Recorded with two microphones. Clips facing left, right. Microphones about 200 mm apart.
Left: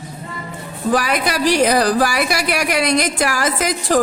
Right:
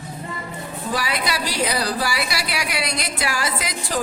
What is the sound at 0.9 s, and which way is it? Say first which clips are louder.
A woman's voice: left 6 dB; 50° left (ahead or behind).